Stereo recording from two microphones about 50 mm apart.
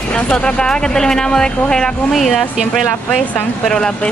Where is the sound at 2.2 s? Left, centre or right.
Centre.